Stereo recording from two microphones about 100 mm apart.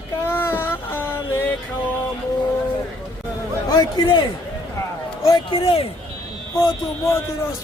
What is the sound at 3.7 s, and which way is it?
Speech, 45° left (ahead or behind).